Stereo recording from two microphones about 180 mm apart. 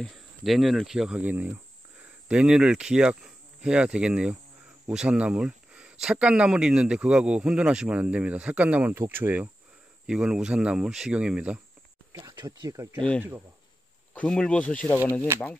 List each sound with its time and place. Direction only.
0.0 s speech: centre (ahead or behind)
12.1 s speech: 20° right (ahead or behind)
14.1 s speech: 5° left (ahead or behind)